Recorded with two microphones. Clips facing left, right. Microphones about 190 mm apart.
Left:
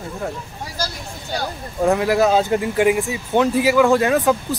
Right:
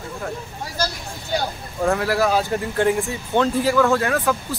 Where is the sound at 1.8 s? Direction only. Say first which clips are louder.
Left 3 dB; 15° left (ahead or behind).